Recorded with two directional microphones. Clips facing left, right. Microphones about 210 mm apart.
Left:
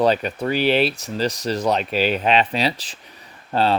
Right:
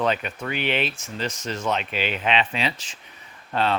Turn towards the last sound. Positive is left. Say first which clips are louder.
# left 4 dB
turn(degrees=35)  # may be behind; listen again after turning